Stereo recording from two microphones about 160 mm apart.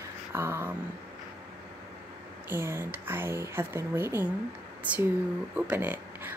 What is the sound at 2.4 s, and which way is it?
Speech, 15° right (ahead or behind).